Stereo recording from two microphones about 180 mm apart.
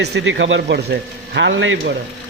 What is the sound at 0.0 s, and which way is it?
A man's voice, 80° right.